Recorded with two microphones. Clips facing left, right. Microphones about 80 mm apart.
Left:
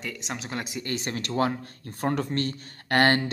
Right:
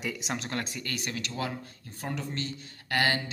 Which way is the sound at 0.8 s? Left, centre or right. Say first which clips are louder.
Left 4 dB; left.